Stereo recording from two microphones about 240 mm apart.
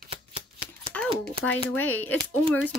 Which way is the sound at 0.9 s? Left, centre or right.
Centre.